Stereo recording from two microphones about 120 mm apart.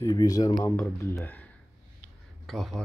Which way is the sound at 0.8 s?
10° left (ahead or behind).